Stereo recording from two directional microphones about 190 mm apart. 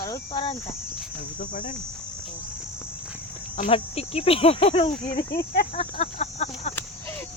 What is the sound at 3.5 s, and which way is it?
Speech, 35° left (ahead or behind).